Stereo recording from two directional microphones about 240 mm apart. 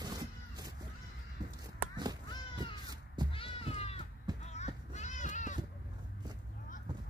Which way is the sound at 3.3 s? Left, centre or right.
Left.